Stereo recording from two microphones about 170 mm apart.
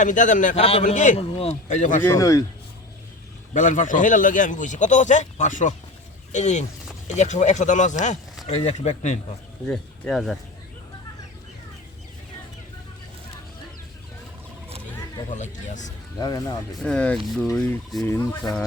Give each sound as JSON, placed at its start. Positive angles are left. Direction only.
{"t": 0.0, "sound": "a man's voice", "side_deg": 50}
{"t": 0.6, "sound": "speech", "side_deg": 35}
{"t": 1.2, "sound": "a man's voice", "side_deg": 35}
{"t": 2.1, "sound": "speech", "side_deg": 20}
{"t": 3.5, "sound": "a man's voice", "side_deg": 45}
{"t": 9.6, "sound": "speech", "side_deg": 5}
{"t": 15.3, "sound": "a man's voice", "side_deg": 45}
{"t": 16.1, "sound": "speech", "side_deg": 20}
{"t": 16.7, "sound": "speech", "side_deg": 5}
{"t": 17.6, "sound": "fowl", "side_deg": 10}